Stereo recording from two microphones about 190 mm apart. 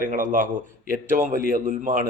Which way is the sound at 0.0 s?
40° right (ahead or behind).